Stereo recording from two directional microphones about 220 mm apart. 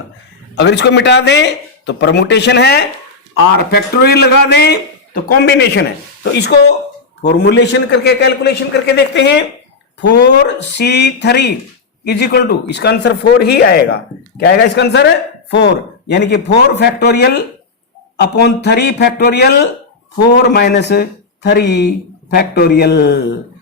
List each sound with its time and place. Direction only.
0.5 s speech: 50° left (ahead or behind)